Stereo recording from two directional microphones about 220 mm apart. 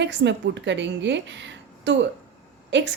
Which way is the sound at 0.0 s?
55° right (ahead or behind).